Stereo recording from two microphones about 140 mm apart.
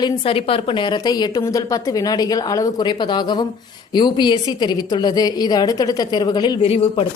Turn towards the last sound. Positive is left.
turn(degrees=40)  # may be behind; listen again after turning